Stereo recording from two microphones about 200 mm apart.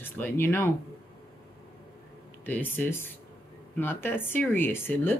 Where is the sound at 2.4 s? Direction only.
10° left (ahead or behind).